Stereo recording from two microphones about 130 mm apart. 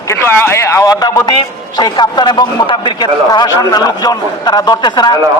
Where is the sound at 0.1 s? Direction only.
20° left (ahead or behind).